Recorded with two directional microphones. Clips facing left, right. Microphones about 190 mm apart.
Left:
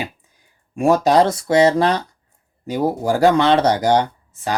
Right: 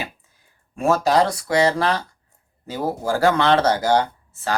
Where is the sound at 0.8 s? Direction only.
15° left (ahead or behind).